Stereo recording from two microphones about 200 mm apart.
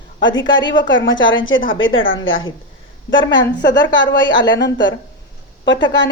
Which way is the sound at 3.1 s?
65° left (ahead or behind).